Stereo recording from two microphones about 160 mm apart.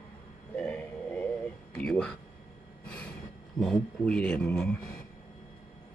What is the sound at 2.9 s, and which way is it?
Vehicle, 10° left (ahead or behind).